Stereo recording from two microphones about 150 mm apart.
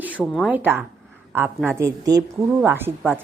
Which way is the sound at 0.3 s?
10° right (ahead or behind).